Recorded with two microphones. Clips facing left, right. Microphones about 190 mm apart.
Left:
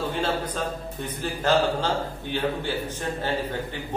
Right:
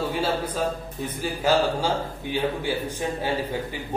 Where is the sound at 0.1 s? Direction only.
5° right (ahead or behind).